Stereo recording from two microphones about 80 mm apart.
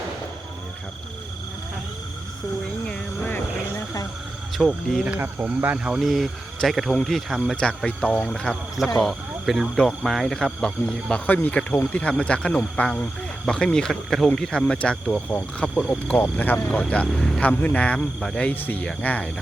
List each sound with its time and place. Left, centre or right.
2.8 s vehicle: centre
4.5 s speech: centre
5.2 s speech: right; by 7.5 s centre
7.5 s speech: centre
11.3 s speech: left
17.2 s speech: centre
17.4 s speech: centre